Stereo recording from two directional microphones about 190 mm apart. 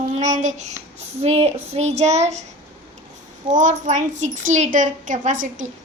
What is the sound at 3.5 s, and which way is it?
A child's voice, 40° right (ahead or behind).